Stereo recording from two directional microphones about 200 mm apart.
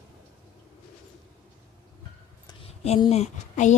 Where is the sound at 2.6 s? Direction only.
30° left (ahead or behind).